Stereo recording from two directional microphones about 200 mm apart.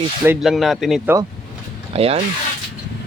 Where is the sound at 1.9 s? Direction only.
30° right (ahead or behind).